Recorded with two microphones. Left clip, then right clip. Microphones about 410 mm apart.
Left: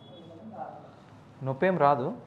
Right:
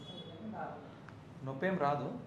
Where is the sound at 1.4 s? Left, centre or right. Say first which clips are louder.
Left 10 dB; left.